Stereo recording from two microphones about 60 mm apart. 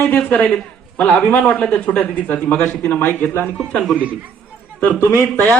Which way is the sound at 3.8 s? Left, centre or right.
Right.